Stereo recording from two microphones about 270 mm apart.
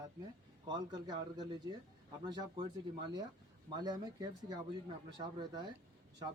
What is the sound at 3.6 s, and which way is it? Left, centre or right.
Speech, centre.